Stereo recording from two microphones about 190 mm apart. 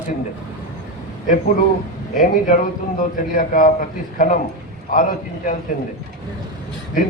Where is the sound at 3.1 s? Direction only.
45° left (ahead or behind).